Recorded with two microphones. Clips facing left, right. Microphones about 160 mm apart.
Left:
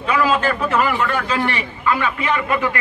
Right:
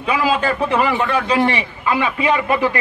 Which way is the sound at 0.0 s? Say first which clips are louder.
Even; 25° right (ahead or behind).